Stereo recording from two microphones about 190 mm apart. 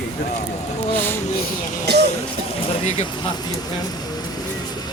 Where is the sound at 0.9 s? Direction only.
10° left (ahead or behind).